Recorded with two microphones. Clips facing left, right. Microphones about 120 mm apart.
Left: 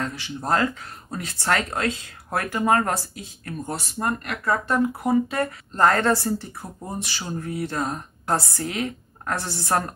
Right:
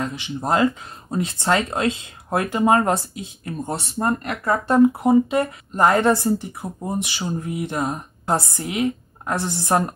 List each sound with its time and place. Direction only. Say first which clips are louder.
0.0 s speech: right 3 dB; 20° right (ahead or behind)